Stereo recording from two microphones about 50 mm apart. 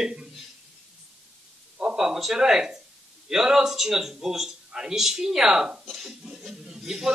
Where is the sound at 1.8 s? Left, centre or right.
Right.